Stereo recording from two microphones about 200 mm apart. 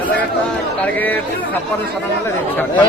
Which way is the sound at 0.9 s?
10° left (ahead or behind).